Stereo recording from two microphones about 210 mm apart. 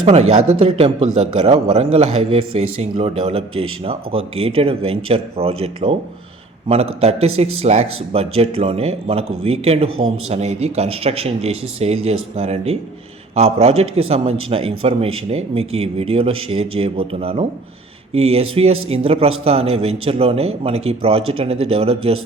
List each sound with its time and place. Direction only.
0.0 s a man's voice: 30° right (ahead or behind)